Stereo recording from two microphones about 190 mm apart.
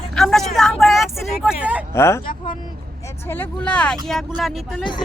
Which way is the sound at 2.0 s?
15° left (ahead or behind).